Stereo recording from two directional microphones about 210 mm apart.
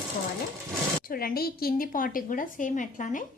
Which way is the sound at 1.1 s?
45° left (ahead or behind).